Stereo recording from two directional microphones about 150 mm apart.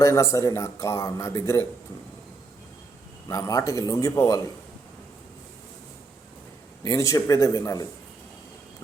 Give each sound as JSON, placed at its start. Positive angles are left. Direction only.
{"t": 0.0, "sound": "speech", "side_deg": 20}
{"t": 3.2, "sound": "speech", "side_deg": 20}
{"t": 6.8, "sound": "speech", "side_deg": 20}